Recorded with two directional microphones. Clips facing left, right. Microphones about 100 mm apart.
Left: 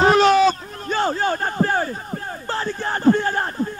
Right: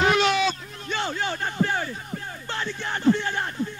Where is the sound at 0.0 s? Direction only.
40° left (ahead or behind).